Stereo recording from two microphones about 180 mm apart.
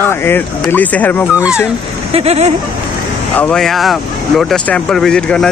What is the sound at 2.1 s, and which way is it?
Speech, 35° right (ahead or behind).